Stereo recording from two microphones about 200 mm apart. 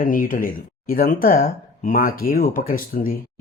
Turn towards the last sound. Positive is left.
turn(degrees=45)  # may be behind; listen again after turning